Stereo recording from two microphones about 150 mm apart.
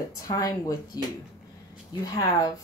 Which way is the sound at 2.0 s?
25° left (ahead or behind).